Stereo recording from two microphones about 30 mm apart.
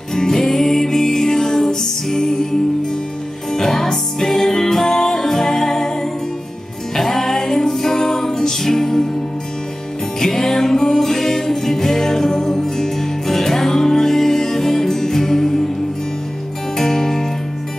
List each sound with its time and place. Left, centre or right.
0.1 s music: centre
3.5 s music: centre
7.0 s music: centre
10.2 s music: centre
16.7 s music: centre